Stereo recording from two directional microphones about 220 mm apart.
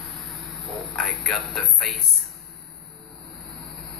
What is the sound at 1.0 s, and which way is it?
Speech, centre (ahead or behind).